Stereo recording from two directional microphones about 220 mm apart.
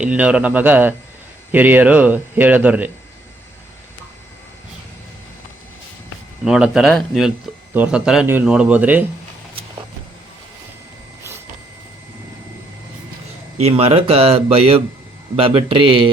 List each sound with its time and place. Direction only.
0.0 s speech: 5° right (ahead or behind)
6.4 s speech: centre (ahead or behind)
13.6 s speech: 30° right (ahead or behind)